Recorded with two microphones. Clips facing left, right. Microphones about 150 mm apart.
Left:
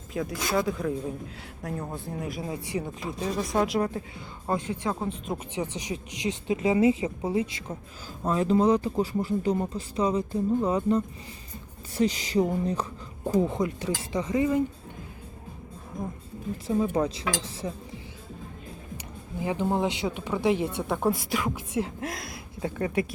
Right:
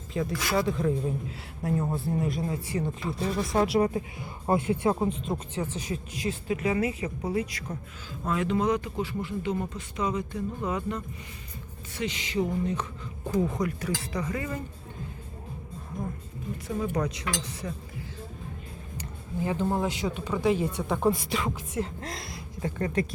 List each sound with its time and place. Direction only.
0.1 s a man's voice: centre (ahead or behind)
2.7 s a woman's voice: 10° left (ahead or behind)
3.5 s speech: 5° right (ahead or behind)
4.9 s a man's voice: centre (ahead or behind)
5.5 s a woman's voice: 15° left (ahead or behind); by 12.8 s 35° left (ahead or behind)
13.4 s a woman's voice: 25° left (ahead or behind)
16.6 s a woman's voice: 25° left (ahead or behind)
19.4 s a woman's voice: 15° left (ahead or behind)